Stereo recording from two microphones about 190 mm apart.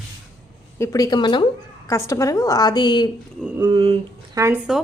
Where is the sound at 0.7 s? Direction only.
15° left (ahead or behind).